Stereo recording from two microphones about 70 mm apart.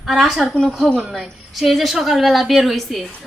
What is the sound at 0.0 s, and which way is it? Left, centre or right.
A woman's voice, centre.